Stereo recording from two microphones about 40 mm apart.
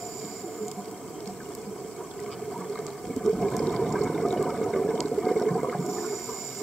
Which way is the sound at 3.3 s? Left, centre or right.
Centre.